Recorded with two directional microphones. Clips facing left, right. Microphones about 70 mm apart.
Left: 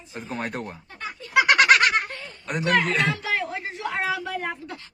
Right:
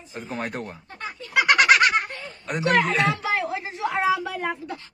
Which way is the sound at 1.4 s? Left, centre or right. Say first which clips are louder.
Right 1 dB; centre.